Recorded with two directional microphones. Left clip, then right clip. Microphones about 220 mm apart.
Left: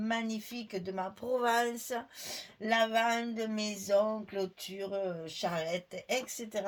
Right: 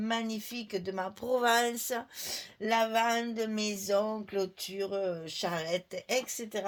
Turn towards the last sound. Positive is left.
turn(degrees=-35)  # may be behind; listen again after turning